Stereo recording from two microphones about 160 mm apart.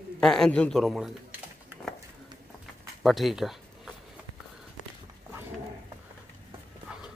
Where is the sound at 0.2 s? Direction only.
5° left (ahead or behind).